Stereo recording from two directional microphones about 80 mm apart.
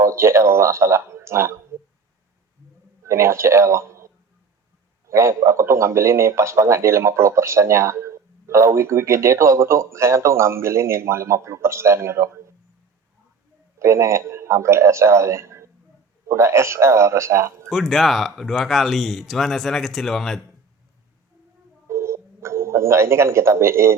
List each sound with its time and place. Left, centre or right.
0.0 s speech: right
3.0 s a man's voice: right
13.7 s a man's voice: right
17.7 s speech: centre
21.8 s a sound: right